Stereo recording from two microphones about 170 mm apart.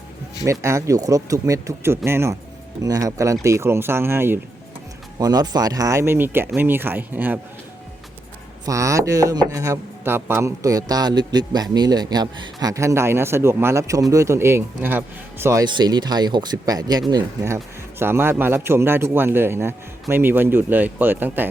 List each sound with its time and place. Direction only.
0.4 s a man's voice: 15° right (ahead or behind)
8.6 s a man's voice: 20° right (ahead or behind)